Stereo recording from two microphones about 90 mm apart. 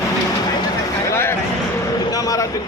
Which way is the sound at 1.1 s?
30° left (ahead or behind).